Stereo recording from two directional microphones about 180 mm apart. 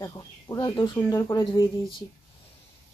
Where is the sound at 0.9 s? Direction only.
15° left (ahead or behind).